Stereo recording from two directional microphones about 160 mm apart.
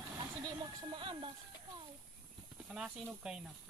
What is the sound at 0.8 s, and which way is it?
Speech, 30° right (ahead or behind).